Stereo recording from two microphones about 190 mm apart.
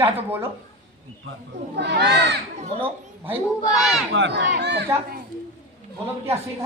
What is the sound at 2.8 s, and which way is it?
A man's voice, 10° right (ahead or behind).